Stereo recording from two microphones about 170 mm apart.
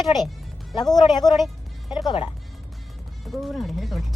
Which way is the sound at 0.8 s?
25° left (ahead or behind).